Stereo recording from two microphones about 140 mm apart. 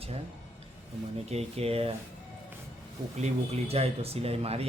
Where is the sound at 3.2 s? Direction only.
45° right (ahead or behind).